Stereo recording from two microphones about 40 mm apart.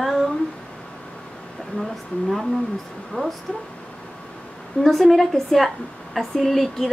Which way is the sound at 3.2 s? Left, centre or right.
Left.